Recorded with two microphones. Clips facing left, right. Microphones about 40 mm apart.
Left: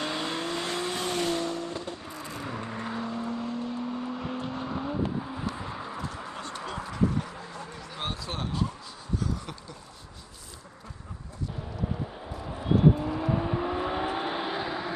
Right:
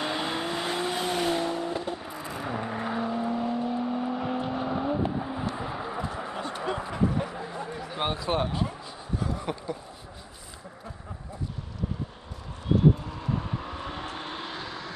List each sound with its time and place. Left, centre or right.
0.0 s vehicle: centre
5.6 s a sound: centre
12.6 s vehicle: centre